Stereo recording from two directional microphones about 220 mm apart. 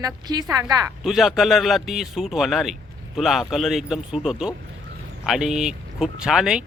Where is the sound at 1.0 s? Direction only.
Centre (ahead or behind).